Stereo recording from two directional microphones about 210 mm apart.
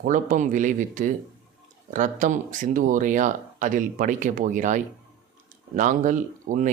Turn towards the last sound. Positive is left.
turn(degrees=-40)  # may be behind; listen again after turning